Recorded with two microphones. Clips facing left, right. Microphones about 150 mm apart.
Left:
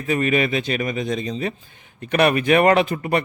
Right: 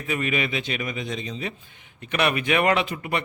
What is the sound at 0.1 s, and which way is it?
Speech, 40° left (ahead or behind).